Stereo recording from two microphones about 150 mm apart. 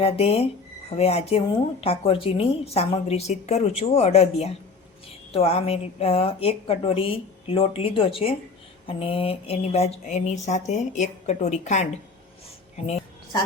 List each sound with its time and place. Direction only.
0.0 s a woman's voice: 40° left (ahead or behind)